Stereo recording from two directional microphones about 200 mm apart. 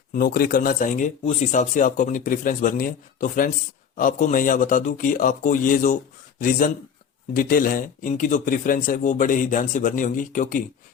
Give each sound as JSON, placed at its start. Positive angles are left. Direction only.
{"t": 0.1, "sound": "speech", "side_deg": 45}